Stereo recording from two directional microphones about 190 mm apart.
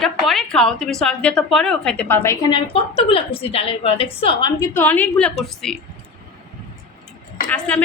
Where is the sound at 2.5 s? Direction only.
30° left (ahead or behind).